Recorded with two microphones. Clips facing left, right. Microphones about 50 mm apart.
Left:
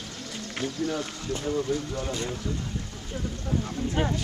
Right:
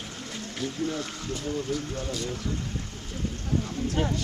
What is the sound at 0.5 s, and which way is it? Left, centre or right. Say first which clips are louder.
Speech: left 1 dB; left.